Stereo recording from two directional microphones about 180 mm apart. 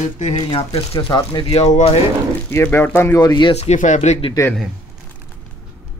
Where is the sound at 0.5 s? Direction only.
30° left (ahead or behind).